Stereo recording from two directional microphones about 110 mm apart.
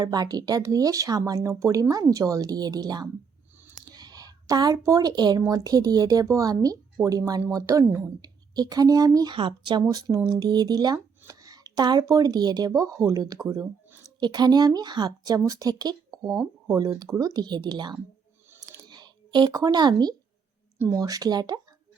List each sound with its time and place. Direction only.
0.0 s speech: 40° right (ahead or behind)
3.8 s a sound: 35° right (ahead or behind)
5.5 s speech: 35° right (ahead or behind)
8.2 s speech: 35° right (ahead or behind)
9.3 s speech: 50° right (ahead or behind)
9.8 s speech: 30° right (ahead or behind)
16.3 s speech: centre (ahead or behind)
16.7 s speech: 35° right (ahead or behind)